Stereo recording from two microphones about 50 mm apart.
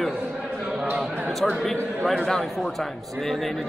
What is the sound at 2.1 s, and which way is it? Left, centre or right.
Speech, centre.